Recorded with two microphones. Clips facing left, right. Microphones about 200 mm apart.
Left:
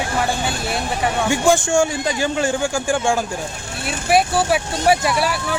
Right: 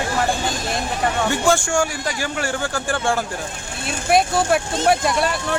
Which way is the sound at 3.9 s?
5° left (ahead or behind).